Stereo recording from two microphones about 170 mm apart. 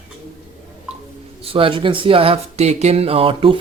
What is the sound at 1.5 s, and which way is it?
Speech, 30° right (ahead or behind).